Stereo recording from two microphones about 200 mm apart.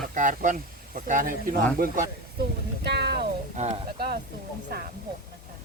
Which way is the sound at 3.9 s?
50° right (ahead or behind).